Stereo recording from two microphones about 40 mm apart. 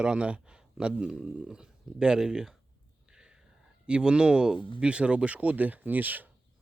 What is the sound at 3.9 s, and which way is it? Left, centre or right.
Speech, right.